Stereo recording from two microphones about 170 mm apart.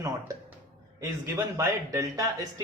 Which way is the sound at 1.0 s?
20° right (ahead or behind).